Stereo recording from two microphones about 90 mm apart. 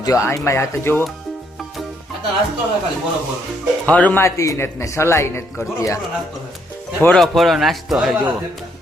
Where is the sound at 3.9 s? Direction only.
15° left (ahead or behind).